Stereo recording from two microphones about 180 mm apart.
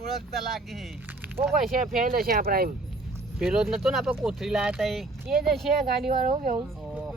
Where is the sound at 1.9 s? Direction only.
55° right (ahead or behind).